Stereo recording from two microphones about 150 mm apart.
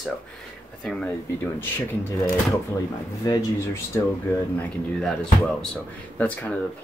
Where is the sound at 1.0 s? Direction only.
15° left (ahead or behind).